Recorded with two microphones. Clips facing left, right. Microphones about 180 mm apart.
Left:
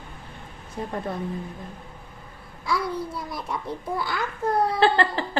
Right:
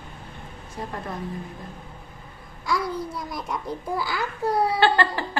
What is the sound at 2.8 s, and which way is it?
Speech, 30° left (ahead or behind).